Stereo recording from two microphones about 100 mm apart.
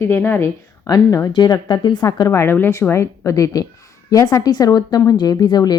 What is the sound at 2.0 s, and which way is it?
A woman's voice, 35° left (ahead or behind).